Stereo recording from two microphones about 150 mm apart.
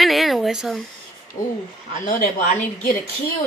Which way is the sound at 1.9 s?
60° left (ahead or behind).